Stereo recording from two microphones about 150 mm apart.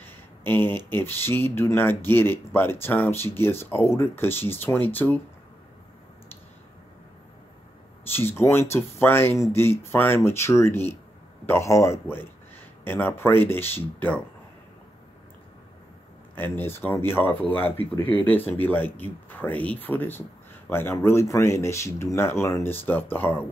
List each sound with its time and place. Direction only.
0.0 s speech: 15° left (ahead or behind)
8.1 s speech: 15° left (ahead or behind)
16.3 s speech: 15° left (ahead or behind)